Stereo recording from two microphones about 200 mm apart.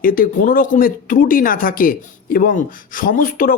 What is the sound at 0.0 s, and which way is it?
Speech, 45° left (ahead or behind).